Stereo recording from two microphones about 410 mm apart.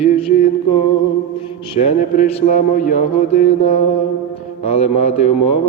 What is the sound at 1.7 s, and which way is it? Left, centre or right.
Mantra, centre.